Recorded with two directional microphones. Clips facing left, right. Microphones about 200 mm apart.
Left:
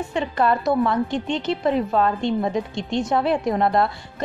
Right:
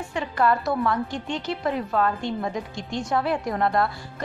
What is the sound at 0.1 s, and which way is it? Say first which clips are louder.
A woman's voice: left 1 dB; 25° left (ahead or behind).